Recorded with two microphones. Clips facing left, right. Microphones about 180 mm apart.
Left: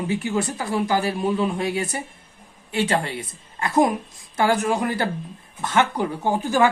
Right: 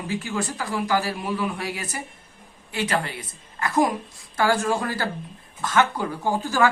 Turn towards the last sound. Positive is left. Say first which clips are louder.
# left 2 dB
turn(degrees=20)  # may be behind; listen again after turning